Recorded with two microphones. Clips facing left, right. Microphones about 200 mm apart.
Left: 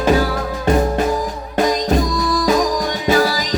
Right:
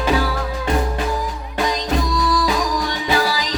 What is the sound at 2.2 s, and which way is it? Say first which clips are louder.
Music: left 3 dB; 45° left (ahead or behind).